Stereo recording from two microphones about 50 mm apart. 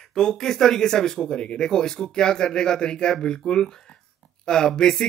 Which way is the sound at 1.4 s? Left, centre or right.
Left.